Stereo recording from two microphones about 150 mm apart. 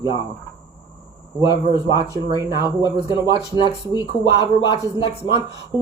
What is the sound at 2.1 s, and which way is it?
Speech, 20° right (ahead or behind).